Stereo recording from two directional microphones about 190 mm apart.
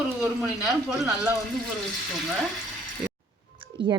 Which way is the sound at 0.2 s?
5° right (ahead or behind).